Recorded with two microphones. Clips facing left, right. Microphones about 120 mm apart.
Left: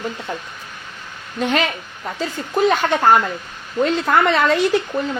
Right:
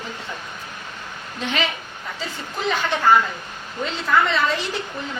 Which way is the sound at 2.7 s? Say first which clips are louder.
Even; 45° left (ahead or behind).